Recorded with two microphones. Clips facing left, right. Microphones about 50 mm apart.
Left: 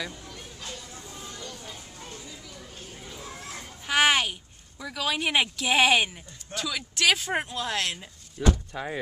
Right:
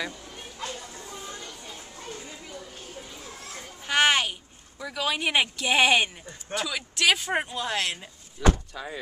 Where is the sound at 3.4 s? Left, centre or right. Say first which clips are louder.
Left 1 dB; left.